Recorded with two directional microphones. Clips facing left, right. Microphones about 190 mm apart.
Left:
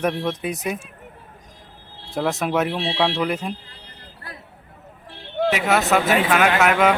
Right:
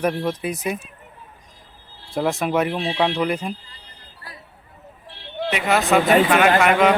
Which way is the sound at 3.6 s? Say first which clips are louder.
Left 3 dB; 60° left (ahead or behind).